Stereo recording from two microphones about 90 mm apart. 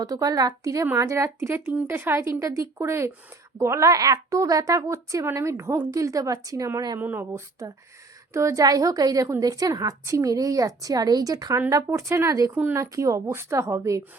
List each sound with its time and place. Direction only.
0.0 s a woman's voice: 40° right (ahead or behind)
7.0 s a woman's voice: 25° right (ahead or behind)